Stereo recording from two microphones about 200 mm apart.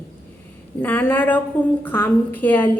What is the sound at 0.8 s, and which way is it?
A woman's voice, 10° left (ahead or behind).